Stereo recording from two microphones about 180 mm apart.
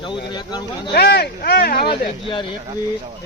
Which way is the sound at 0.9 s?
65° left (ahead or behind).